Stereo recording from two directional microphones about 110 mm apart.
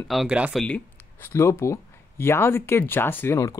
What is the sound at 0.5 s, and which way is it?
Speech, 10° left (ahead or behind).